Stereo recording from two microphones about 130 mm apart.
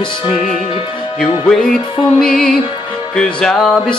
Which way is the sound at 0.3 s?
75° left (ahead or behind).